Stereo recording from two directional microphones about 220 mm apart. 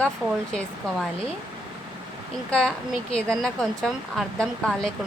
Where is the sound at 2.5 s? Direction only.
5° left (ahead or behind).